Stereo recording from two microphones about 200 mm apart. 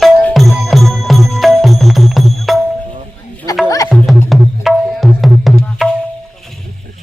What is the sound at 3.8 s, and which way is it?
Music, centre (ahead or behind).